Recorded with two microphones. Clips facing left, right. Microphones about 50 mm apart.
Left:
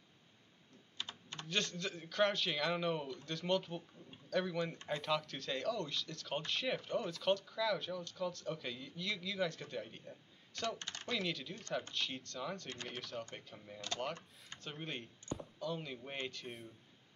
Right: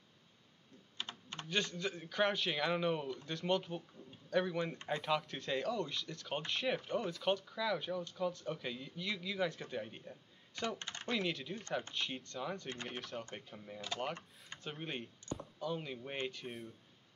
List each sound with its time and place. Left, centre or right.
1.0 s typing: right
1.5 s speech: centre
11.1 s speech: centre
12.8 s speech: centre